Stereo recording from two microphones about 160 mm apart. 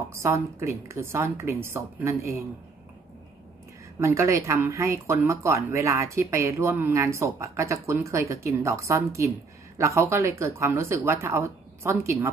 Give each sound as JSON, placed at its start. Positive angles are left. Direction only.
{"t": 0.1, "sound": "speech", "side_deg": -15}
{"t": 4.0, "sound": "speech", "side_deg": -20}